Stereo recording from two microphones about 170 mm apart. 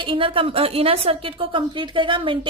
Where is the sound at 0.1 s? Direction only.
30° right (ahead or behind).